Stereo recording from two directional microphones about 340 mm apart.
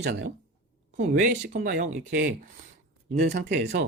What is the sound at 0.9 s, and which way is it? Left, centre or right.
Speech, right.